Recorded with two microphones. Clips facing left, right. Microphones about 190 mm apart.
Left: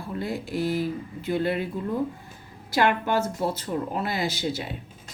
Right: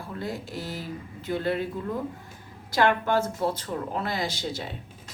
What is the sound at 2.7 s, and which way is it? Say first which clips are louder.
Speech: even; 10° left (ahead or behind).